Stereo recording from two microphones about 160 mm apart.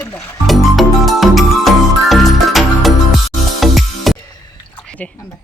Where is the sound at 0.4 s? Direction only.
Centre (ahead or behind).